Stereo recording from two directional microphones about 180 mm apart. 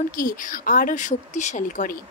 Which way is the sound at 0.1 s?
50° left (ahead or behind).